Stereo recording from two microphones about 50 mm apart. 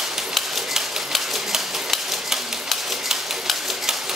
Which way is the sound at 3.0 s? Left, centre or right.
Centre.